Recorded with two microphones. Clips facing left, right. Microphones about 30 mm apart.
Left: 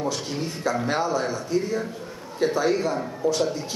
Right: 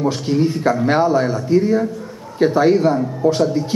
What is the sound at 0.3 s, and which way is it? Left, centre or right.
A man's voice, right.